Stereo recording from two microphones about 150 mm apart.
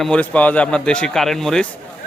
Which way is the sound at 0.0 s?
5° left (ahead or behind).